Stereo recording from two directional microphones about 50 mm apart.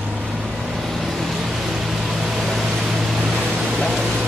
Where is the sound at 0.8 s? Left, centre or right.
Centre.